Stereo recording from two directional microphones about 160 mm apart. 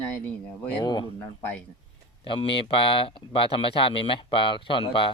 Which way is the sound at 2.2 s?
35° left (ahead or behind).